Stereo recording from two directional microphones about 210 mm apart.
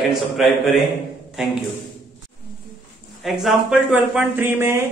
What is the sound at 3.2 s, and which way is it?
Speech, centre (ahead or behind).